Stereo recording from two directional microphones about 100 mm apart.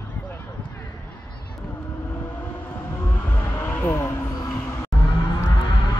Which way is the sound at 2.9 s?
20° left (ahead or behind).